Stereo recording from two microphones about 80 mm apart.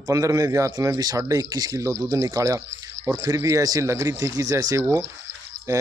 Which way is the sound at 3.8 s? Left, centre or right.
Right.